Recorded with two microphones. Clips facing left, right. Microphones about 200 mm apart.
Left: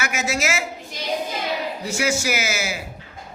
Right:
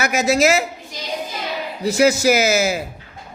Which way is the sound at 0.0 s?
35° right (ahead or behind).